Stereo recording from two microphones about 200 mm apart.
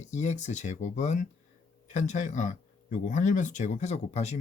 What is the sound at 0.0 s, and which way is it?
Speech, 35° left (ahead or behind).